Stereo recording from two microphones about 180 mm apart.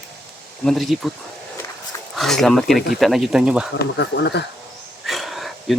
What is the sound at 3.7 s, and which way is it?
Speech, 70° left (ahead or behind).